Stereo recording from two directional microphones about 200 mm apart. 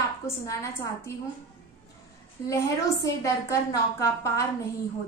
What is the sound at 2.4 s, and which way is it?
A woman's voice, 15° left (ahead or behind).